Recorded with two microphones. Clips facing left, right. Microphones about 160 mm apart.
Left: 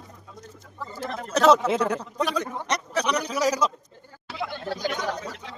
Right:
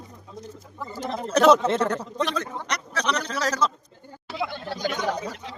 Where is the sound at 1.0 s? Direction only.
20° right (ahead or behind).